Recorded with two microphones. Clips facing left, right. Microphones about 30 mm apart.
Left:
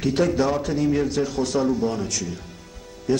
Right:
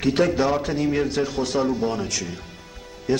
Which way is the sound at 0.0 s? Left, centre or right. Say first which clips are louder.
Right 1 dB; centre.